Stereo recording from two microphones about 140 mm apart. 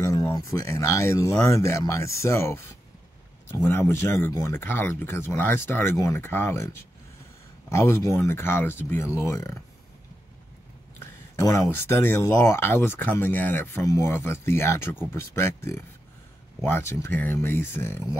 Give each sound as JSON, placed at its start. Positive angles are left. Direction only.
{"t": 0.0, "sound": "speech", "side_deg": 25}
{"t": 11.0, "sound": "speech", "side_deg": 20}